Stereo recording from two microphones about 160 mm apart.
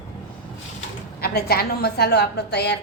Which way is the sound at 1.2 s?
75° left (ahead or behind).